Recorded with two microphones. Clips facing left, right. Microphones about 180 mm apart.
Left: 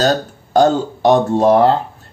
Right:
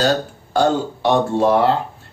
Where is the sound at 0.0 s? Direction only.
40° left (ahead or behind).